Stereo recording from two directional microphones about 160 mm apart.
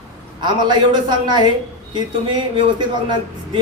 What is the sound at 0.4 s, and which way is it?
A man's voice, 30° right (ahead or behind).